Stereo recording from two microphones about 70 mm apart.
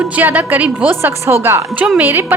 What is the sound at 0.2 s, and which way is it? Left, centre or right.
A woman's voice, right.